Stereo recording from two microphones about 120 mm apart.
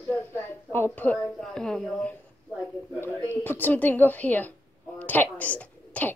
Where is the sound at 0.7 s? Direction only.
15° left (ahead or behind).